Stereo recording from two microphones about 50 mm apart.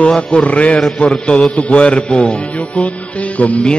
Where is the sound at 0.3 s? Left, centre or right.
Left.